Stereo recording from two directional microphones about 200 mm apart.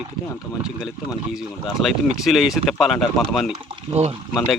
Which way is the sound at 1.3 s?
Centre (ahead or behind).